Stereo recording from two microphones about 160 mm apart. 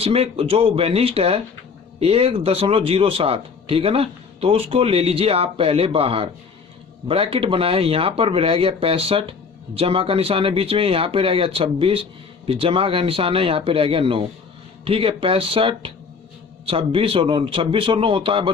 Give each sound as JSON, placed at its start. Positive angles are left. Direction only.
{"t": 0.0, "sound": "speech", "side_deg": -35}